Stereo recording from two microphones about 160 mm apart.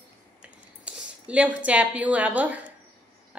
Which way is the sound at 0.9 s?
5° right (ahead or behind).